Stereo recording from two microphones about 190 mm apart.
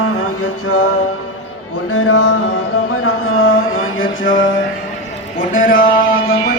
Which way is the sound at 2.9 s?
90° left.